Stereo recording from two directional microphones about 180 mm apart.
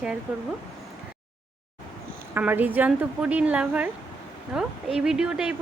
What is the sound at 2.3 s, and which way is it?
Speech, 10° right (ahead or behind).